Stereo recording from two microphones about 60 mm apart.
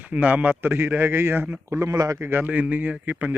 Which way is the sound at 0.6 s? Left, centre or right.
Right.